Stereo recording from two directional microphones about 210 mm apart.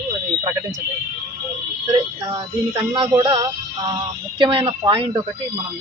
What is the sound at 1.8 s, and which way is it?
Speech, 15° right (ahead or behind).